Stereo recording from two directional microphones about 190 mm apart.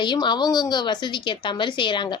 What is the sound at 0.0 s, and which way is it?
A woman's voice, 25° left (ahead or behind).